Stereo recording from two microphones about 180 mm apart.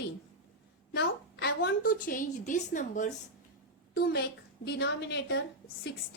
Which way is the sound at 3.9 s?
60° left (ahead or behind).